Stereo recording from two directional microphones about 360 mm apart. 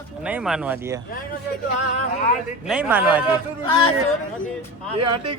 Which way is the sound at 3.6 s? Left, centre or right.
Centre.